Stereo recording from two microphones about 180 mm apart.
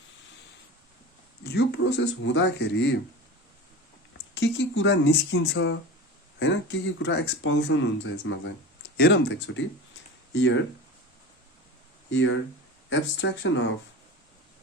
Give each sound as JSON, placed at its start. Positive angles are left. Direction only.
{"t": 1.5, "sound": "speech", "side_deg": 65}
{"t": 4.4, "sound": "speech", "side_deg": 80}
{"t": 9.0, "sound": "speech", "side_deg": 65}
{"t": 12.1, "sound": "speech", "side_deg": 90}